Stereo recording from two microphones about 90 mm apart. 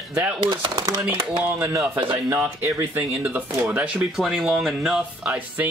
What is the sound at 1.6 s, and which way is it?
Speech, 35° right (ahead or behind).